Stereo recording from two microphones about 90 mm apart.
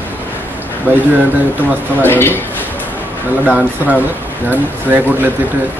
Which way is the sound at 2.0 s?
25° left (ahead or behind).